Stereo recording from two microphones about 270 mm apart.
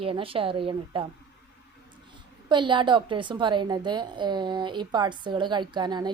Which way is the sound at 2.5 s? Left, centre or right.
Centre.